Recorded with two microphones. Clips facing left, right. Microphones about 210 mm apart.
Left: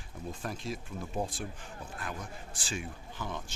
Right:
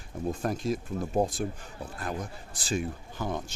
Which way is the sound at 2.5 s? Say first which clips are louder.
Right 9 dB; 40° right (ahead or behind).